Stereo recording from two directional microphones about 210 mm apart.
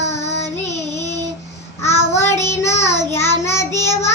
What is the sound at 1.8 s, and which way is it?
Child singing, 15° left (ahead or behind).